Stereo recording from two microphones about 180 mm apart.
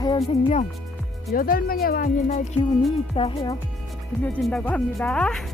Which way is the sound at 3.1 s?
30° left (ahead or behind).